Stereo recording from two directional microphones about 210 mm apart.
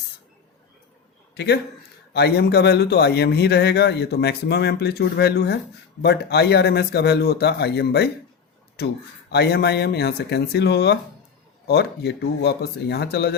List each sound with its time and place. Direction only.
2.1 s a man's voice: 50° left (ahead or behind)